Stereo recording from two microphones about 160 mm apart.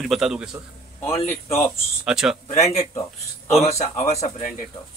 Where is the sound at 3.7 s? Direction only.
45° left (ahead or behind).